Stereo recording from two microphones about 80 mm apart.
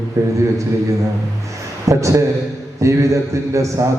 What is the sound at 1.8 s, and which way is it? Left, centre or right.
A man's voice, right.